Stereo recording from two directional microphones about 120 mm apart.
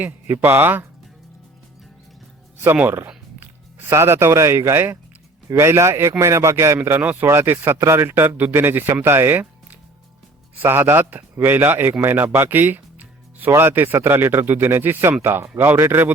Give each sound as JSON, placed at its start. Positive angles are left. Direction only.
{"t": 0.0, "sound": "speech", "side_deg": -15}
{"t": 2.6, "sound": "a man's voice", "side_deg": -15}